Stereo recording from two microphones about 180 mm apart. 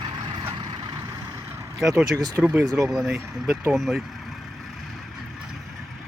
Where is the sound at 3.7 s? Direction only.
Centre (ahead or behind).